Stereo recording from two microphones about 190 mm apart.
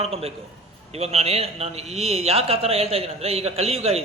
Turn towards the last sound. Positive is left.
turn(degrees=-30)  # may be behind; listen again after turning